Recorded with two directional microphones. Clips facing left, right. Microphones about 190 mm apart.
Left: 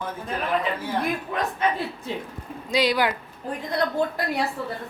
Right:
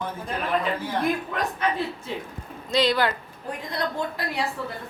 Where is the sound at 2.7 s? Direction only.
10° left (ahead or behind).